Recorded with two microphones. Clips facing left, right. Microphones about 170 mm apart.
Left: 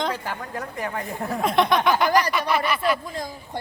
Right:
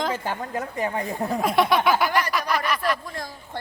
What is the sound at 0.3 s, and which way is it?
A woman's voice, 20° right (ahead or behind).